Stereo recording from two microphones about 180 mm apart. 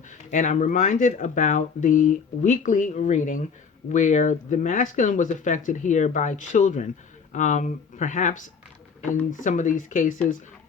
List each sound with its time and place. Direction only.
0.1 s speech: 45° left (ahead or behind)
9.4 s speech: 45° left (ahead or behind)